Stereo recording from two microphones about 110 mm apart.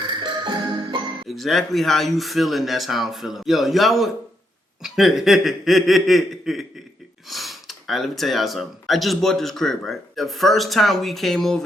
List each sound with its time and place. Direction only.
0.0 s music: 45° right (ahead or behind)
1.3 s speech: centre (ahead or behind)